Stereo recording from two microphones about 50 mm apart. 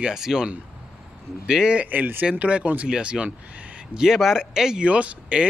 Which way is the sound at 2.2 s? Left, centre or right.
Right.